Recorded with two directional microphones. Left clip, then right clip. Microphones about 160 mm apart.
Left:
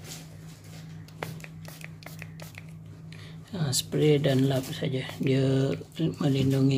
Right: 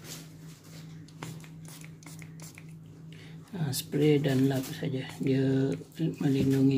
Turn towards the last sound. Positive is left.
turn(degrees=20)  # may be behind; listen again after turning